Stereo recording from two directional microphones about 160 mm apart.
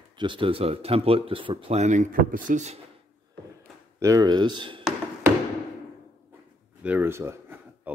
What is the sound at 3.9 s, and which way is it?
Speech, 20° right (ahead or behind).